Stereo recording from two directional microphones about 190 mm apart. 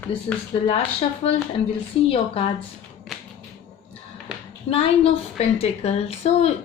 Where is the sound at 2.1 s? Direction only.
30° left (ahead or behind).